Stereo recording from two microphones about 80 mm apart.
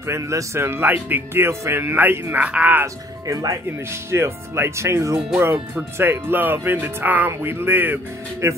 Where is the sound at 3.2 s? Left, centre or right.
Right.